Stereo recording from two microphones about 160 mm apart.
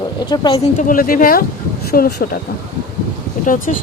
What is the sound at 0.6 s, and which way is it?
A woman's voice, 55° left (ahead or behind).